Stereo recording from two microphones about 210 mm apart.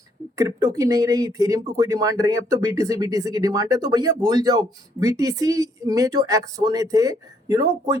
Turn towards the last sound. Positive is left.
turn(degrees=-15)  # may be behind; listen again after turning